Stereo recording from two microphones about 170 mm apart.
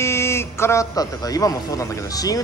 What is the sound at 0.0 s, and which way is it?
A man's voice, 15° left (ahead or behind).